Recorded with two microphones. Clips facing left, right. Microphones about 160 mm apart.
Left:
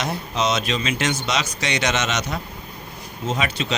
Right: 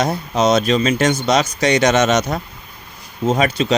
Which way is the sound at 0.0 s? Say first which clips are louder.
Right 7 dB; 40° right (ahead or behind).